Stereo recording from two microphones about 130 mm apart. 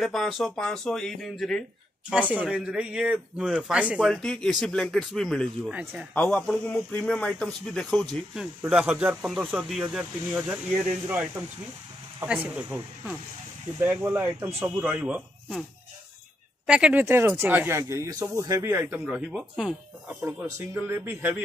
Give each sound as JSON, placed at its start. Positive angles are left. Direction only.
{"t": 0.0, "sound": "a man's voice", "side_deg": 0}
{"t": 2.0, "sound": "speech", "side_deg": -10}
{"t": 4.1, "sound": "a man's voice", "side_deg": 5}
{"t": 5.7, "sound": "speech", "side_deg": -10}
{"t": 6.1, "sound": "a man's voice", "side_deg": 10}
{"t": 12.3, "sound": "speech", "side_deg": -10}
{"t": 13.7, "sound": "speech", "side_deg": -15}
{"t": 16.6, "sound": "speech", "side_deg": -10}
{"t": 17.0, "sound": "speech", "side_deg": -20}
{"t": 19.0, "sound": "a man's voice", "side_deg": -5}
{"t": 20.5, "sound": "speech", "side_deg": -20}